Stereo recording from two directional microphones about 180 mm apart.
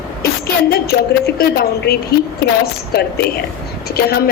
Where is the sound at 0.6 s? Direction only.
60° left (ahead or behind).